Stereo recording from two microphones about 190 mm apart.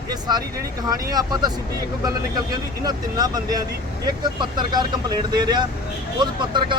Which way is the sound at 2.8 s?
20° right (ahead or behind).